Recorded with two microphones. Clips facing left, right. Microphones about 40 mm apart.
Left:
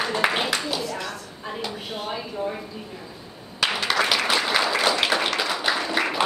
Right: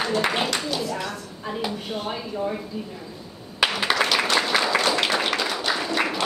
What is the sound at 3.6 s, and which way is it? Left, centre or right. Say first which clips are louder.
Applause: right 2 dB; centre.